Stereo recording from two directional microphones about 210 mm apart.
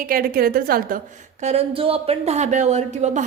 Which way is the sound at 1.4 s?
30° right (ahead or behind).